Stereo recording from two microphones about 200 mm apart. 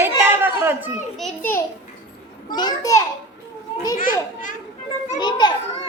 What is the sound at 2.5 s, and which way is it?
Speech, 20° left (ahead or behind).